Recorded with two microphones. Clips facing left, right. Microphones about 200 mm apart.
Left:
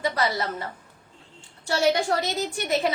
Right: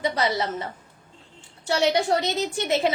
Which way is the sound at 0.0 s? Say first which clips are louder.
Right 1 dB; 20° right (ahead or behind).